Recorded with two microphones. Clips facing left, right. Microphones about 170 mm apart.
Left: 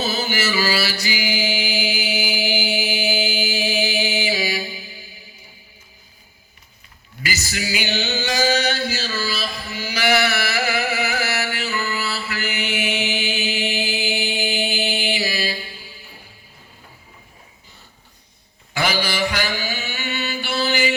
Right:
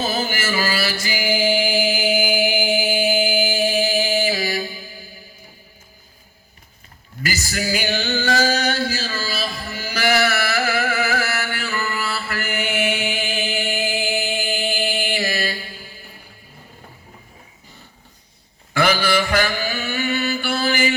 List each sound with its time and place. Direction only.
0.0 s music: 50° right (ahead or behind)
7.2 s a sound: 45° right (ahead or behind)
8.4 s chant: 50° right (ahead or behind)
18.8 s mantra: 50° right (ahead or behind)